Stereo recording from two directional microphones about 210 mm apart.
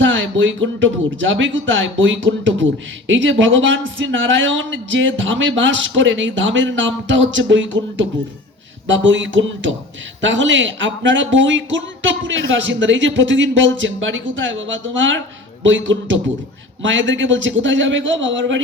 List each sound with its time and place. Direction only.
0.0 s speech: 65° right (ahead or behind)